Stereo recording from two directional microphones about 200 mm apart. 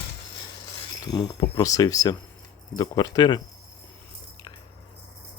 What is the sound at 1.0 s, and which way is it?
Speech, 20° left (ahead or behind).